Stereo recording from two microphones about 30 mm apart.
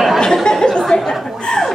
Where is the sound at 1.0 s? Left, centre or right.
Centre.